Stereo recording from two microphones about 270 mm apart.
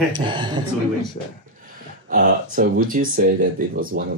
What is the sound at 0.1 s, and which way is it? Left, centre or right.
Speech, centre.